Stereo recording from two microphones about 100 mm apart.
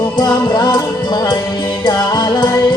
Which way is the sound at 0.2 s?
45° left (ahead or behind).